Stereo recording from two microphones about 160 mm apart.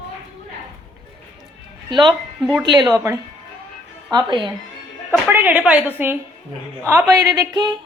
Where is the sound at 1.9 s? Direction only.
30° right (ahead or behind).